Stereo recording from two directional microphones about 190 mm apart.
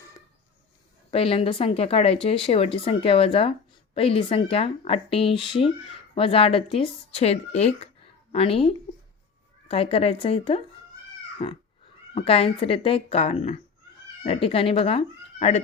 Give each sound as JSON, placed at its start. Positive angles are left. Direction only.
{"t": 1.1, "sound": "speech", "side_deg": 30}